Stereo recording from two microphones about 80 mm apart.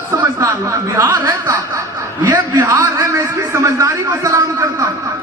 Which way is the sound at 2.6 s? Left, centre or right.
Right.